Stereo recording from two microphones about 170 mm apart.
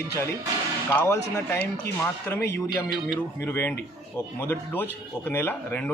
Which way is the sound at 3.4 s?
15° left (ahead or behind).